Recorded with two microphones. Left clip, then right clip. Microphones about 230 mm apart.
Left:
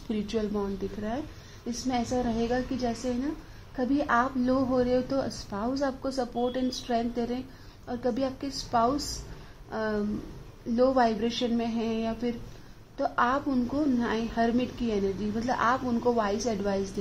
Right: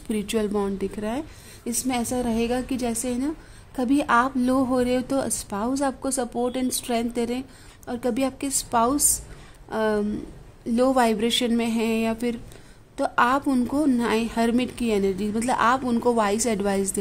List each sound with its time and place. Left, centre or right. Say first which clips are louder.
0.1 s a woman's voice: right 6 dB; right